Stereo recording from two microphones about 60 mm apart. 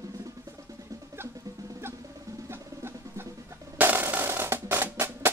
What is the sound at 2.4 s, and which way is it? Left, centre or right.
Music, right.